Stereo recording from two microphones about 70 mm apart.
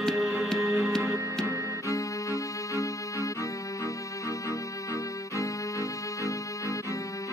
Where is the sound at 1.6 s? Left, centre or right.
Left.